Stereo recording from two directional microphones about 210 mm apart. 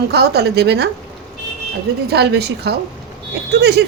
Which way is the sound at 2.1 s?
50° right (ahead or behind).